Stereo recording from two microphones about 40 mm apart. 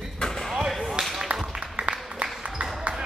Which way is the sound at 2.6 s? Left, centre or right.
Right.